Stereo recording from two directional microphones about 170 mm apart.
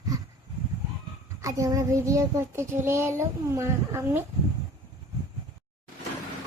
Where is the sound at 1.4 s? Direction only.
20° right (ahead or behind).